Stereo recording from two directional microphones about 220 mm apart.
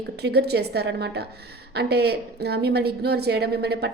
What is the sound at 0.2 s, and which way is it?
A woman's voice, 50° right (ahead or behind).